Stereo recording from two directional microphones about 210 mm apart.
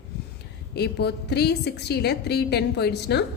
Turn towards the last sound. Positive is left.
turn(degrees=50)  # may be behind; listen again after turning